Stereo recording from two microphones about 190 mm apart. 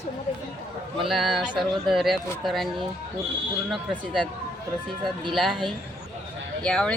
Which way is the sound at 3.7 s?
Centre (ahead or behind).